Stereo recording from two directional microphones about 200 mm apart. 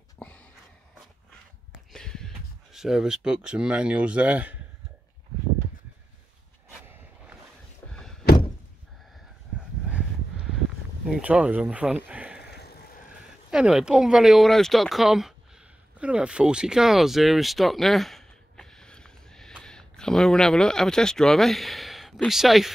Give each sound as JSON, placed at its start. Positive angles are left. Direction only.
{"t": 0.2, "sound": "a sound", "side_deg": 5}
{"t": 1.9, "sound": "speech", "side_deg": 0}
{"t": 7.9, "sound": "door", "side_deg": 0}
{"t": 11.1, "sound": "speech", "side_deg": -5}
{"t": 12.4, "sound": "vehicle", "side_deg": 55}
{"t": 13.5, "sound": "speech", "side_deg": -5}